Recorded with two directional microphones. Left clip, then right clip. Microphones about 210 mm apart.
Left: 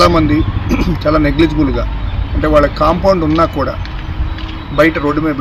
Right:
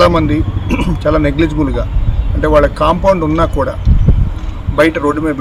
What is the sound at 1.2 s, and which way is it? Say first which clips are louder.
Speech: left 1 dB; 30° right (ahead or behind).